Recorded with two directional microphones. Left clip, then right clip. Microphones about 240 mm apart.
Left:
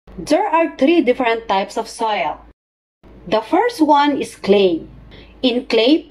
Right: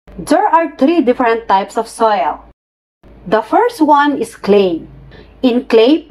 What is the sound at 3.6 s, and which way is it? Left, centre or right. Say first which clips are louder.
A woman's voice: right 3 dB; right.